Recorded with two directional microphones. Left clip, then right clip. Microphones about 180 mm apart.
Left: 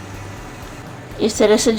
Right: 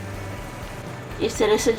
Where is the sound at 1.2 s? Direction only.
60° left (ahead or behind).